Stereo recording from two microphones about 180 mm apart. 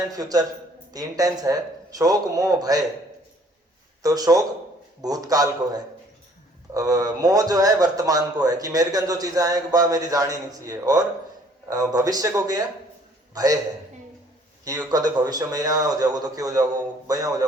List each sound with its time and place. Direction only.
0.1 s a man's voice: 20° right (ahead or behind)
4.0 s a man's voice: 20° right (ahead or behind)
14.6 s a man's voice: 20° right (ahead or behind)